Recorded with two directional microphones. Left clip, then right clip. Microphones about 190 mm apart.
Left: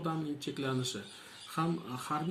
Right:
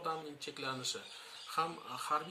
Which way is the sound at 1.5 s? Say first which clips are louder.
Left 1 dB; 30° left (ahead or behind).